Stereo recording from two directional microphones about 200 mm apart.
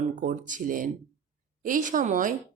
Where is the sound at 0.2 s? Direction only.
40° right (ahead or behind).